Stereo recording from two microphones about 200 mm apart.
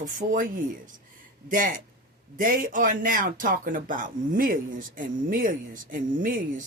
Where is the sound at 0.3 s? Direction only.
40° right (ahead or behind).